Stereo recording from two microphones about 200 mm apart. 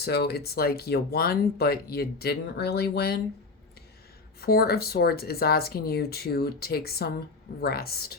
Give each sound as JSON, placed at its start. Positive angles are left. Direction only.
{"t": 0.0, "sound": "speech", "side_deg": 50}
{"t": 4.4, "sound": "speech", "side_deg": 50}